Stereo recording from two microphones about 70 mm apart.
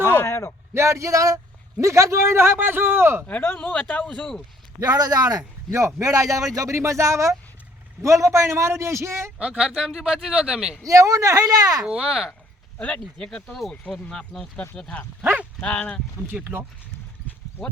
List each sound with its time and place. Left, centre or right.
0.0 s a sound: left
0.7 s a man's voice: right
3.2 s speech: left
4.8 s a man's voice: right
5.4 s a man's voice: right
9.4 s speech: centre
10.8 s a man's voice: right
11.8 s speech: centre
12.8 s speech: centre
16.3 s a man's voice: right